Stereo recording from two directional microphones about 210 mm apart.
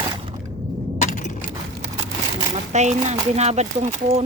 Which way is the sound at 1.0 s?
35° left (ahead or behind).